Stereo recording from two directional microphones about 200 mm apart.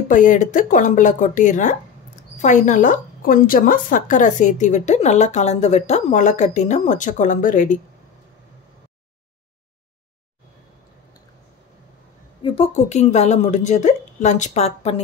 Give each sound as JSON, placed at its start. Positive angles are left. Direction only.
{"t": 0.1, "sound": "a woman's voice", "side_deg": 40}
{"t": 12.4, "sound": "a woman's voice", "side_deg": 25}